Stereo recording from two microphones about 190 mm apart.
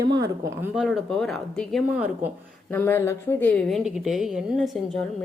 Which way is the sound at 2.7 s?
10° left (ahead or behind).